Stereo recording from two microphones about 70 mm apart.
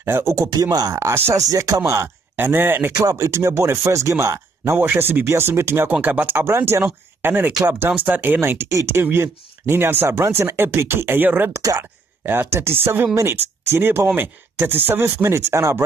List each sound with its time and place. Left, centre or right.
0.0 s speech: right
0.7 s speech: right
0.9 s speech: right
1.3 s speech: right
2.3 s speech: right
4.7 s speech: right
6.8 s speech: right
11.5 s speech: right
12.3 s speech: right
15.2 s speech: right